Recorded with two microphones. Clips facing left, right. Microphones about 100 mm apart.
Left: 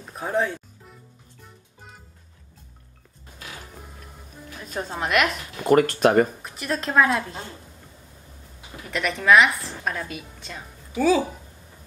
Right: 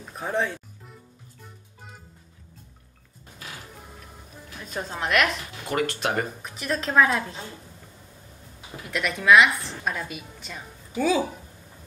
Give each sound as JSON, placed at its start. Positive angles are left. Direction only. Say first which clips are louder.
{"t": 0.1, "sound": "music", "louder": "left 2 dB", "side_deg": 0}
{"t": 4.6, "sound": "a woman's voice", "louder": "left 2 dB", "side_deg": 5}
{"t": 5.7, "sound": "speech", "louder": "left 9 dB", "side_deg": 45}
{"t": 6.4, "sound": "a woman's voice", "louder": "left 1 dB", "side_deg": 0}
{"t": 8.9, "sound": "a woman's voice", "louder": "even", "side_deg": 0}